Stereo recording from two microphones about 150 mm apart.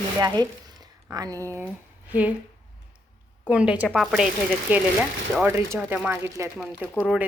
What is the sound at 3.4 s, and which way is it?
A woman's voice, 5° right (ahead or behind).